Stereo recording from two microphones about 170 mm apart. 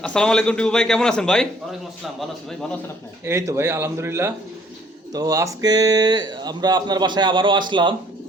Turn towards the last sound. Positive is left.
turn(degrees=-25)  # may be behind; listen again after turning